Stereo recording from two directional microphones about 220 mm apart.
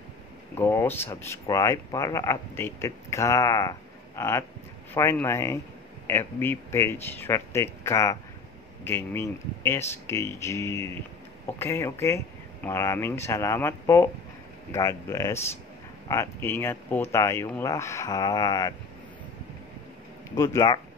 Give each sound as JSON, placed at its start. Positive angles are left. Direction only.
{"t": 0.6, "sound": "speech", "side_deg": 10}
{"t": 20.3, "sound": "speech", "side_deg": 15}